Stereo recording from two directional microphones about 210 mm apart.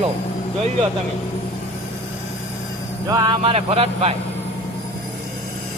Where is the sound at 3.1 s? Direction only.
20° right (ahead or behind).